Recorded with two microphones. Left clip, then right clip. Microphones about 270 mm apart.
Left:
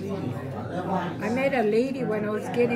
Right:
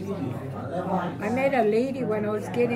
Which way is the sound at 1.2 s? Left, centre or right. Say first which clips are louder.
Right 2 dB; centre.